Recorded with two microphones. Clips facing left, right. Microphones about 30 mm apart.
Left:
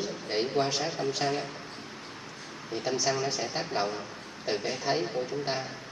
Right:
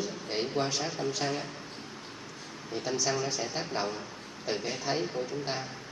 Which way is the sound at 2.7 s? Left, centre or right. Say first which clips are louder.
Left 2 dB; centre.